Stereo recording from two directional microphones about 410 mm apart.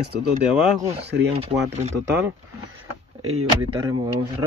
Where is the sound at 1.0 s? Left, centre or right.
Right.